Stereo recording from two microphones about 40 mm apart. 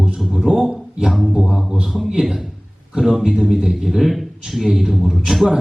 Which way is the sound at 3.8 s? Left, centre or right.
Centre.